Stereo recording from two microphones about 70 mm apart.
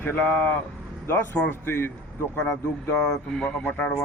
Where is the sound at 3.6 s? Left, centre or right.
Centre.